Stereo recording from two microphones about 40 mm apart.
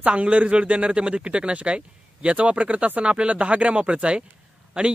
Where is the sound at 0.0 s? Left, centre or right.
Right.